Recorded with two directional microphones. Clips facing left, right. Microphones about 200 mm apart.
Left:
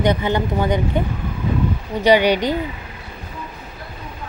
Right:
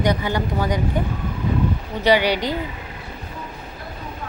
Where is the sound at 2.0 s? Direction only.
20° left (ahead or behind).